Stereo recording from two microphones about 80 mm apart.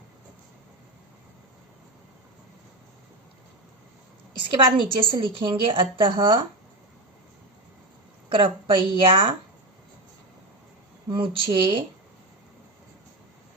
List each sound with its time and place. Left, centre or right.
4.4 s a woman's voice: right
8.3 s a woman's voice: right
11.2 s a woman's voice: right